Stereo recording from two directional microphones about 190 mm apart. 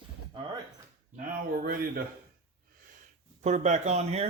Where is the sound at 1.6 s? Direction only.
50° right (ahead or behind).